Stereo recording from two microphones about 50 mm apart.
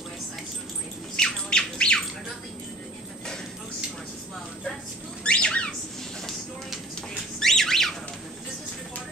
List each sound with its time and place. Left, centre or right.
1.1 s bird: centre
5.2 s squawk: centre
7.0 s a sound: centre